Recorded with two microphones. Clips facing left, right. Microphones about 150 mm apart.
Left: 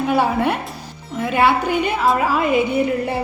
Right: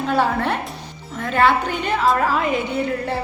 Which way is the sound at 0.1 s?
10° left (ahead or behind).